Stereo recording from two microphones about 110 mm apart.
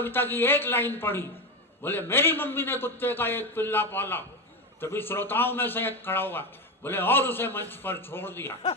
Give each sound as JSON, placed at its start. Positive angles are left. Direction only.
{"t": 0.0, "sound": "a man's voice", "side_deg": 20}